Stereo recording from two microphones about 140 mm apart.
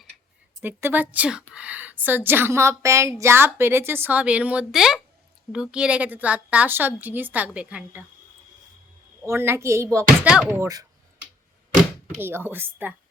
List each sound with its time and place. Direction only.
0.6 s a woman's voice: 15° right (ahead or behind)
9.2 s a woman's voice: 15° right (ahead or behind)
12.2 s a woman's voice: 15° right (ahead or behind)